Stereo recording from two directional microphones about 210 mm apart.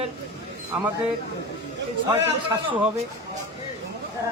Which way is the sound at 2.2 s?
20° right (ahead or behind).